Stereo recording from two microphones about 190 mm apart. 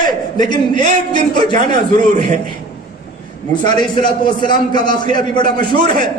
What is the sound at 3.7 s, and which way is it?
A man's voice, 25° left (ahead or behind).